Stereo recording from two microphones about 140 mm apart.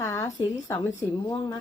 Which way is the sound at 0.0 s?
20° left (ahead or behind).